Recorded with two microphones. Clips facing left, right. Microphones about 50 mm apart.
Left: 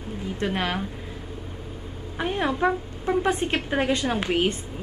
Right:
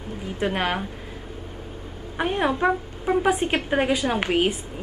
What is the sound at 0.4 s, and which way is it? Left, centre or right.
Speech, centre.